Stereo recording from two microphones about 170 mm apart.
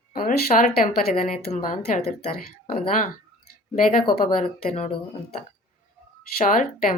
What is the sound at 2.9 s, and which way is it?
Clicking, 55° left (ahead or behind).